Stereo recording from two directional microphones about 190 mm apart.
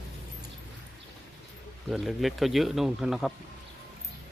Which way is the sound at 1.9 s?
Centre (ahead or behind).